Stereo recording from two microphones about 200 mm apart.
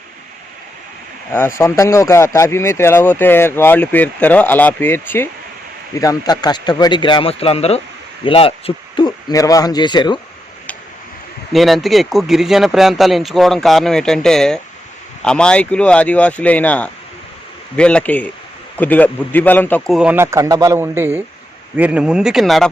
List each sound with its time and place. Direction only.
1.3 s speech: 10° left (ahead or behind)
5.9 s hoot: 15° left (ahead or behind)
11.5 s speech: centre (ahead or behind)
20.0 s speech: 10° right (ahead or behind)